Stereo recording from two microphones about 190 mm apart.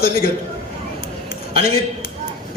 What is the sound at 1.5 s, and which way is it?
Speech, 50° left (ahead or behind).